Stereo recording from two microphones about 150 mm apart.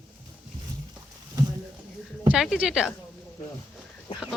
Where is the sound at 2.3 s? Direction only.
5° right (ahead or behind).